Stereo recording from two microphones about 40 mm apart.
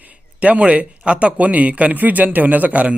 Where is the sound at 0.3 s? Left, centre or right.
Right.